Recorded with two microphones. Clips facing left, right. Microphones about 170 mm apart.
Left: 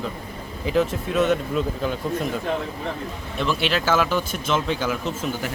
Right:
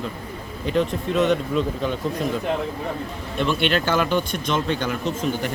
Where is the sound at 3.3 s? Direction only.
Centre (ahead or behind).